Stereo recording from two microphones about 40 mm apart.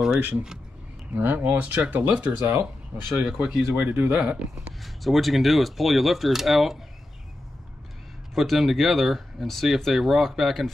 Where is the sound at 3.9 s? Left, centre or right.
Right.